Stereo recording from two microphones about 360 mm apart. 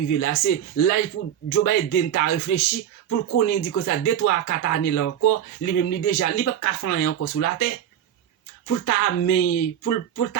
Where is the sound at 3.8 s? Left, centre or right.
Left.